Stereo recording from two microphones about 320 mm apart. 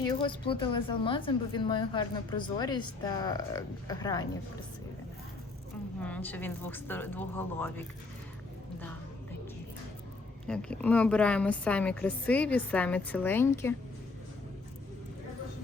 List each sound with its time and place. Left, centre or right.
0.1 s speech: centre
6.0 s a woman's voice: centre
10.4 s a woman's voice: centre